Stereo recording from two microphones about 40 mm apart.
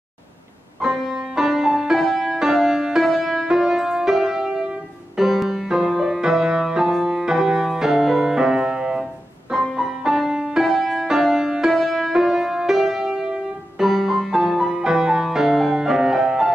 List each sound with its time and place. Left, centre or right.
0.8 s music: centre; by 9.0 s right
9.5 s music: centre
11.7 s music: centre